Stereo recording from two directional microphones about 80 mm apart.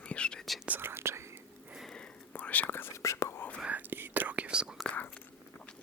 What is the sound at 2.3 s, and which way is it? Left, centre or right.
Whispering, centre.